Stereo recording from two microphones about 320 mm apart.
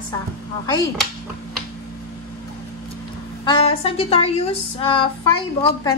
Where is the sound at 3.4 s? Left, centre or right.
Centre.